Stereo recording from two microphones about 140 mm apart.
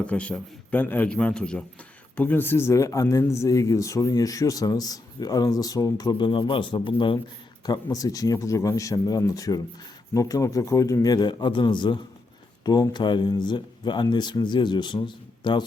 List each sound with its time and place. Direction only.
0.0 s a man's voice: 10° left (ahead or behind); by 15.6 s 35° left (ahead or behind)